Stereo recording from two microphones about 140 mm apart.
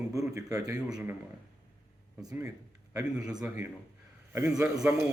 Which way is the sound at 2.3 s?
25° right (ahead or behind).